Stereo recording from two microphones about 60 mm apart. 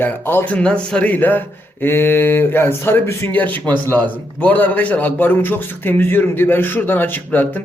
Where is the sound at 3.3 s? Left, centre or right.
Left.